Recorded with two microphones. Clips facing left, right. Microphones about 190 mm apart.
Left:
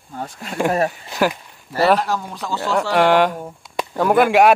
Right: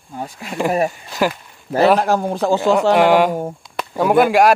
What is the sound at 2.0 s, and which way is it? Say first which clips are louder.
Speech: right 7 dB; 50° right (ahead or behind).